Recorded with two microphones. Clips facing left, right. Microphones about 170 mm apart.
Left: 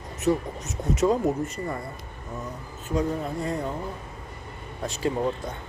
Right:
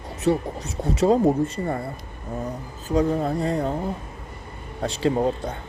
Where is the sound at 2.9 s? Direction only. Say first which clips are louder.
Right 5 dB; 35° right (ahead or behind).